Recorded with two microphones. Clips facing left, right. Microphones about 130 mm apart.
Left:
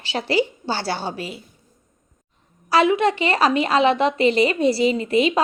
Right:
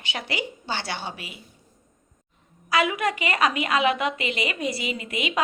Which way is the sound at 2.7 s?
30° left (ahead or behind).